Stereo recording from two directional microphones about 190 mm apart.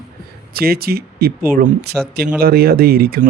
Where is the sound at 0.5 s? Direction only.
55° right (ahead or behind).